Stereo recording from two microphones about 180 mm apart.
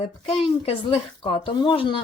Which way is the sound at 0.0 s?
35° left (ahead or behind).